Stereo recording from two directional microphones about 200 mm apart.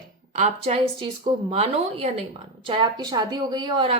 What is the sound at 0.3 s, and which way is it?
A woman's voice, 35° right (ahead or behind).